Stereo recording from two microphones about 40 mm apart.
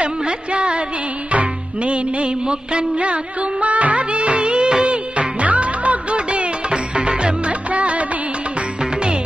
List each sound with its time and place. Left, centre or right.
0.0 s speech: right
1.3 s music: right
3.6 s music of bollywood: right
7.7 s music: right